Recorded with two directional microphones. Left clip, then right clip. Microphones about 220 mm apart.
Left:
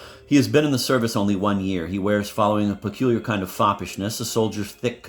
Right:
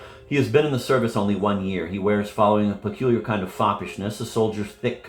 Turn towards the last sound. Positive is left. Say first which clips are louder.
# even
turn(degrees=50)  # may be behind; listen again after turning